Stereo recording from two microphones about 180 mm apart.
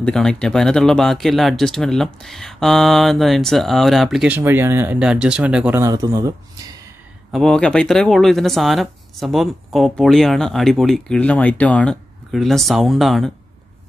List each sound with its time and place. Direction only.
0.0 s speech: 5° left (ahead or behind)
5.8 s a man's voice: 20° right (ahead or behind)
7.2 s speech: centre (ahead or behind)